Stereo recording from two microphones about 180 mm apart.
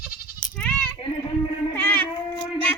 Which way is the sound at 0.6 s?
5° left (ahead or behind).